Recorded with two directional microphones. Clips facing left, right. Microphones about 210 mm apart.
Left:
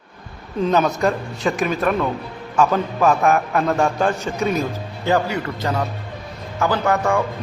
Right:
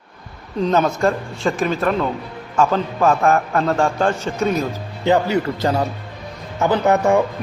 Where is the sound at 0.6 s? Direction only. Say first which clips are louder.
Right 1 dB; 5° left (ahead or behind).